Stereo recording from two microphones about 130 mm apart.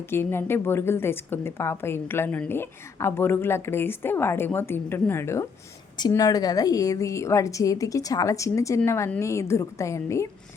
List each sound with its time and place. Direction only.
0.1 s a woman's voice: 20° left (ahead or behind)